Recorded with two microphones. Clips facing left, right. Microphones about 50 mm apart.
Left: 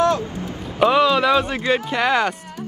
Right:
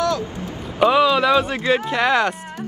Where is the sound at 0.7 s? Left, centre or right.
Centre.